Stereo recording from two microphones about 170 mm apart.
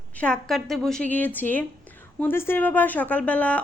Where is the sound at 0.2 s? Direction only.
5° left (ahead or behind).